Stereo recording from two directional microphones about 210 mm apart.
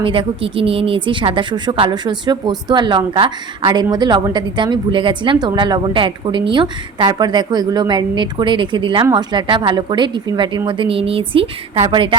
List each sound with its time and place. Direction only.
0.0 s speech: 25° right (ahead or behind)